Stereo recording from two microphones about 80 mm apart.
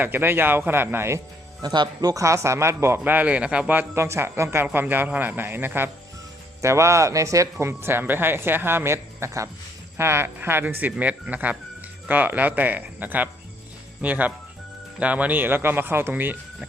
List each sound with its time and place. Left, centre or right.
0.0 s speech: right
1.6 s speech: right
2.2 s speech: right
3.0 s a man's voice: centre
3.9 s speech: right
6.6 s speech: right
7.6 s speech: right